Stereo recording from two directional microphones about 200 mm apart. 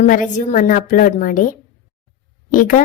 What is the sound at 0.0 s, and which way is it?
Speech, 40° left (ahead or behind).